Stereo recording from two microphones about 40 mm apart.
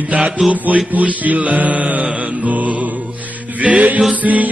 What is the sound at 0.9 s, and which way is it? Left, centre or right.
Mantra, right.